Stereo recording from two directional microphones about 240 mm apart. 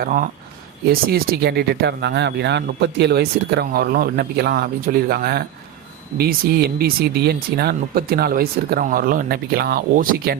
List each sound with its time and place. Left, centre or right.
0.0 s speech: right